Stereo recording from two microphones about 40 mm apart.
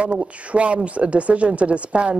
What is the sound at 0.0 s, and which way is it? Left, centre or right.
A man's voice, right.